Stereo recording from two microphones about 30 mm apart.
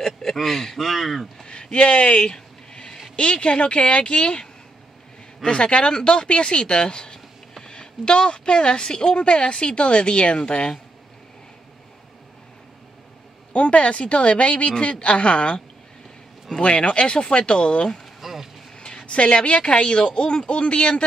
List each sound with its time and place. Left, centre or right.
0.0 s speech: centre
0.7 s speech: centre
1.5 s a sound: left
3.2 s a woman's voice: left
13.5 s a woman's voice: left
16.6 s a woman's voice: left
18.2 s vehicle: centre
19.0 s a woman's voice: left